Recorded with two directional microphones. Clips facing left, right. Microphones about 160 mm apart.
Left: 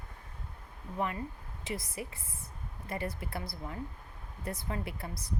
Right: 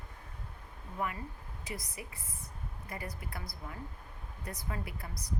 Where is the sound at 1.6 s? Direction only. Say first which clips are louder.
Left 5 dB; 25° left (ahead or behind).